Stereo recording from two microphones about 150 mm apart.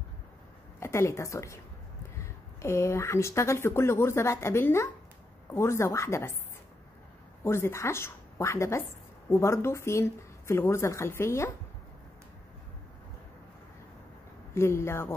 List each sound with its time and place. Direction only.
0.7 s a woman's voice: 20° left (ahead or behind)
7.4 s speech: 15° left (ahead or behind)
14.5 s speech: 15° left (ahead or behind)